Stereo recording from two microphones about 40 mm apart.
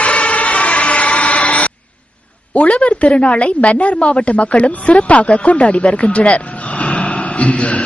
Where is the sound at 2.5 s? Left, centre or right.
Left.